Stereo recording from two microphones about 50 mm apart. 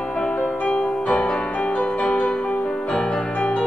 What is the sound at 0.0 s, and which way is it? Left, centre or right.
Music, centre.